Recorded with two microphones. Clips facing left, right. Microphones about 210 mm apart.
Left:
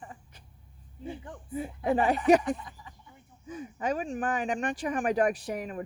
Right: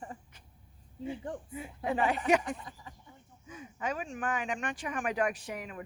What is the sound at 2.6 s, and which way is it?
Speech, 35° right (ahead or behind).